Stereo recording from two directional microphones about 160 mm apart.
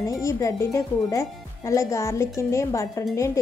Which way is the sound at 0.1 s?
20° left (ahead or behind).